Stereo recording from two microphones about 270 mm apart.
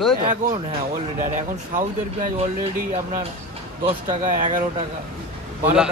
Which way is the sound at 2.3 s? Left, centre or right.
Right.